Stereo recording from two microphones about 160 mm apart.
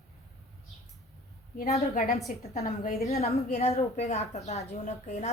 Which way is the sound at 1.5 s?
45° left (ahead or behind).